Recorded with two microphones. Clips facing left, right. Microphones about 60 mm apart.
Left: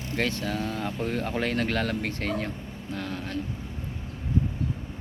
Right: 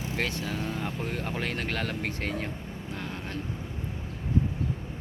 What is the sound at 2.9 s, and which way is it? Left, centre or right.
Vehicle, centre.